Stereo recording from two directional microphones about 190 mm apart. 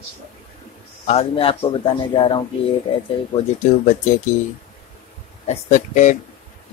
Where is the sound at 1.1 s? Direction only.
30° left (ahead or behind).